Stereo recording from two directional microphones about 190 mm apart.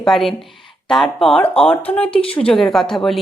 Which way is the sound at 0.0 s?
Centre (ahead or behind).